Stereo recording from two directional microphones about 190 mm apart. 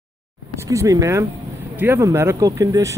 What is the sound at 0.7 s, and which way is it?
A man's voice, 20° right (ahead or behind).